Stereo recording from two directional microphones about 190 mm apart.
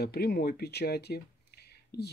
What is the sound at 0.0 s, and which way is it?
Speech, 55° left (ahead or behind).